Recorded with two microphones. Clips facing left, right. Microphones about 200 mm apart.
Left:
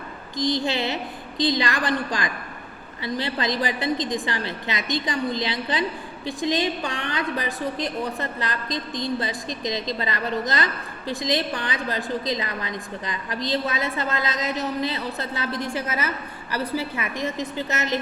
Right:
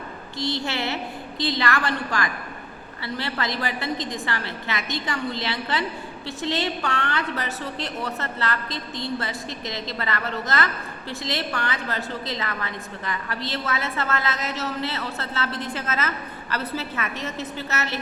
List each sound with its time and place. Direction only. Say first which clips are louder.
0.3 s a woman's voice: left 4 dB; 15° left (ahead or behind)